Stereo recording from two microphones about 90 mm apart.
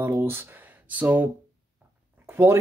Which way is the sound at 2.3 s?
25° right (ahead or behind).